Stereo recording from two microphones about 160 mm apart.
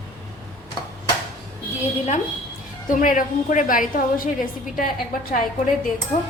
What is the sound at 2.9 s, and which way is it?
A woman's voice, 55° left (ahead or behind).